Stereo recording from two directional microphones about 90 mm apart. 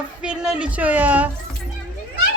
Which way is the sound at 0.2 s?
10° right (ahead or behind).